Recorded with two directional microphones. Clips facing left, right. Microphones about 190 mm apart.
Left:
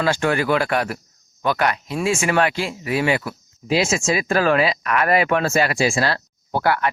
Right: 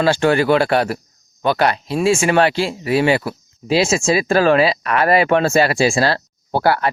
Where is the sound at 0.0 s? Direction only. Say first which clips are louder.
Right 5 dB; 30° right (ahead or behind).